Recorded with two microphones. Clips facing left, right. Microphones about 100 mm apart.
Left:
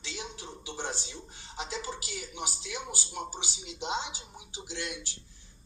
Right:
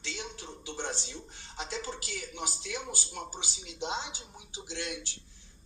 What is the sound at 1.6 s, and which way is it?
Speech, 15° left (ahead or behind).